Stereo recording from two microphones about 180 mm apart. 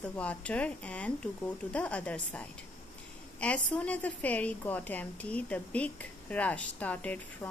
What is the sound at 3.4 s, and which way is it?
A woman's voice, 5° left (ahead or behind).